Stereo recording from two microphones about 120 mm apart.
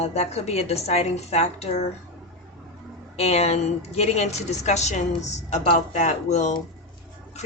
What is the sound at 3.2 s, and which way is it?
A woman's voice, 60° left (ahead or behind).